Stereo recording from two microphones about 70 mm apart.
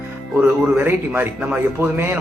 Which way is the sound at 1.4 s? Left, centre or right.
Centre.